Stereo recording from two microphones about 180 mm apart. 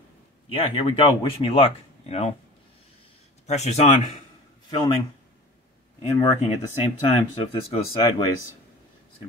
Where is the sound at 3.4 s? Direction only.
40° left (ahead or behind).